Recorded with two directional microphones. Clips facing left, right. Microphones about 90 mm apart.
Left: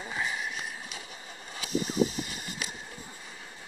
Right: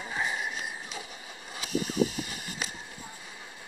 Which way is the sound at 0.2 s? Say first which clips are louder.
Right 2 dB; 20° right (ahead or behind).